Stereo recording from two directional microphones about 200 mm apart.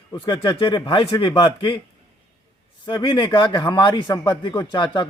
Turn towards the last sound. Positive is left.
turn(degrees=20)  # may be behind; listen again after turning